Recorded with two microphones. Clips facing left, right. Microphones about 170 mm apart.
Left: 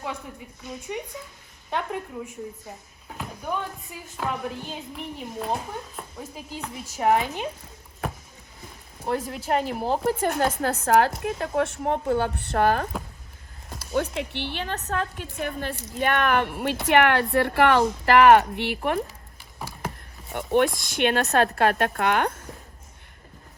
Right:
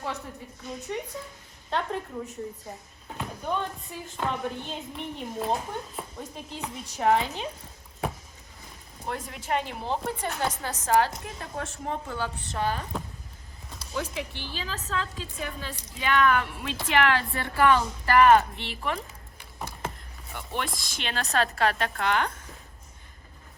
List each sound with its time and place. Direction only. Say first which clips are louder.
0.0 s a sound: left 1 dB; 10° left (ahead or behind)
0.9 s a woman's voice: even; 15° left (ahead or behind)
9.0 s speech: left 6 dB; 35° left (ahead or behind)
10.2 s a woman's voice: left 7 dB; 55° left (ahead or behind)
13.9 s a woman's voice: left 6 dB; 60° left (ahead or behind)
19.5 s a sound: left 1 dB; 5° left (ahead or behind)
20.3 s a woman's voice: left 12 dB; 55° left (ahead or behind)